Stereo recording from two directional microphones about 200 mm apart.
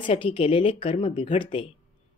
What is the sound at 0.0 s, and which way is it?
Speech, 25° left (ahead or behind).